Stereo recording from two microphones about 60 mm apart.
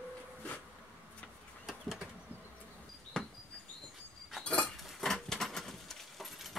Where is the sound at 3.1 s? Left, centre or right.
Centre.